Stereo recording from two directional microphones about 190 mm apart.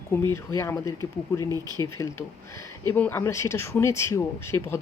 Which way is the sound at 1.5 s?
20° right (ahead or behind).